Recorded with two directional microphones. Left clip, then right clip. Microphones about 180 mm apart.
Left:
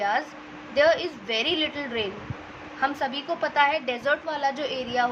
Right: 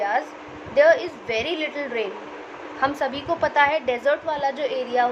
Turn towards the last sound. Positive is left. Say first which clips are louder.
# right 4 dB
turn(degrees=25)  # may be behind; listen again after turning